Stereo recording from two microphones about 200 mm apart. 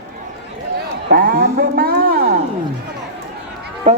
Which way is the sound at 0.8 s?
45° right (ahead or behind).